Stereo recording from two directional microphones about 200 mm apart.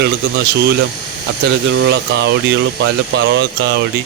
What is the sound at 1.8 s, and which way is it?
Speech, 65° right (ahead or behind).